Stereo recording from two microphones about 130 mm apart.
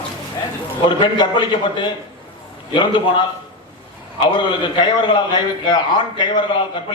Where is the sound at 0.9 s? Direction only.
35° left (ahead or behind).